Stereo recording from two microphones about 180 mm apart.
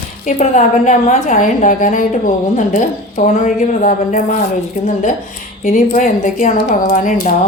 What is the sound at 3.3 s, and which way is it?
A woman's voice, 45° left (ahead or behind).